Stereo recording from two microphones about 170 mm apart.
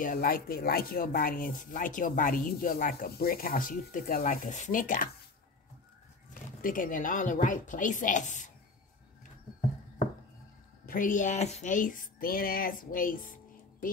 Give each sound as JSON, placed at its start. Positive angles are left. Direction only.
{"t": 0.0, "sound": "speech", "side_deg": 60}
{"t": 6.6, "sound": "speech", "side_deg": 55}
{"t": 10.9, "sound": "speech", "side_deg": 50}